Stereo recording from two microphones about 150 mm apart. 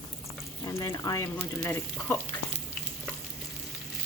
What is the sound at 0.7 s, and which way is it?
Speech, 20° left (ahead or behind).